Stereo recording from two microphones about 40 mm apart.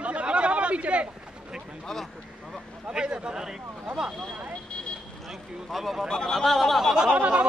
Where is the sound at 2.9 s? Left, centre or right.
Right.